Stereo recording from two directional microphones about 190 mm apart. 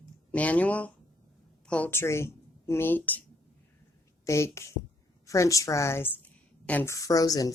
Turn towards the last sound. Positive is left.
turn(degrees=20)  # may be behind; listen again after turning